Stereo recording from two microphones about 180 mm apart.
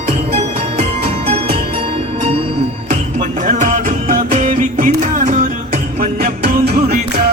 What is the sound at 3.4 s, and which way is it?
Music, 45° right (ahead or behind).